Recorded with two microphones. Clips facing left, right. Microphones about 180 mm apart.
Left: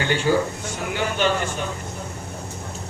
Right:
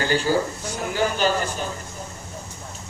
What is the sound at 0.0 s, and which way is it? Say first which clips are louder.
Speech: left 1 dB; 35° right (ahead or behind).